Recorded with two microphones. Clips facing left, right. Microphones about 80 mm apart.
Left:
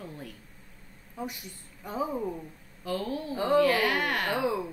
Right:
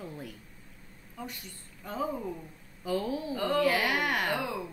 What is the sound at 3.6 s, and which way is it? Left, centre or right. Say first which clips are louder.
Speech: left 2 dB; centre.